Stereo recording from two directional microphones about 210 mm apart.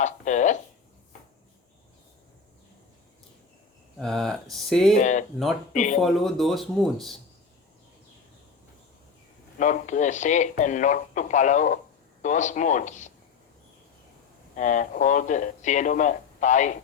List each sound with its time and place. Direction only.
0.0 s a sound: 35° left (ahead or behind)
3.9 s speech: centre (ahead or behind)
4.9 s speech: 35° left (ahead or behind)
6.0 s speech: centre (ahead or behind)
9.6 s speech: 35° left (ahead or behind)
14.5 s speech: 35° left (ahead or behind)